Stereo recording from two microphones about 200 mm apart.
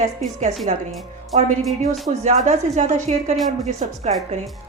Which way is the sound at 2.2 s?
35° right (ahead or behind).